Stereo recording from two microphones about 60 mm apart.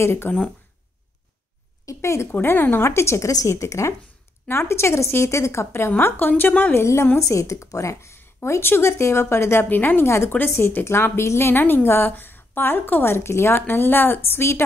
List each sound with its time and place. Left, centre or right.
0.0 s a woman's voice: left
1.9 s a woman's voice: left
2.4 s a woman's voice: left
6.7 s a woman's voice: left
7.2 s speech: left
8.5 s a woman's voice: left
10.0 s a woman's voice: left